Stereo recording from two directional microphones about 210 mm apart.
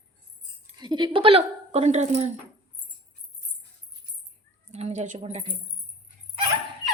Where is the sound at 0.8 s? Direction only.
20° right (ahead or behind).